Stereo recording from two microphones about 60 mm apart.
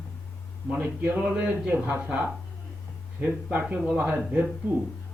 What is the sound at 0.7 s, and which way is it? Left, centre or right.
A man's voice, right.